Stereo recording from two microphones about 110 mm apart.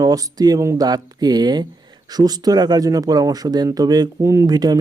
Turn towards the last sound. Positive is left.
turn(degrees=-35)  # may be behind; listen again after turning